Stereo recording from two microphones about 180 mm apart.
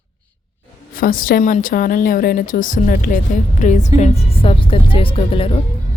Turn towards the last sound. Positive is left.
turn(degrees=30)  # may be behind; listen again after turning